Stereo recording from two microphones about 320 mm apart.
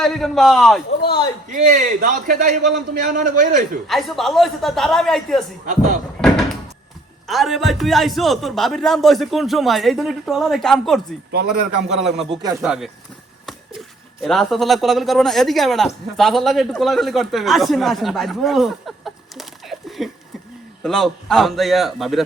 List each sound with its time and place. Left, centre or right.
0.0 s a man's voice: centre
1.0 s a sound: centre
1.5 s a man's voice: right
3.8 s a man's voice: centre
7.3 s a man's voice: centre
11.3 s a man's voice: right
12.2 s a man's voice: centre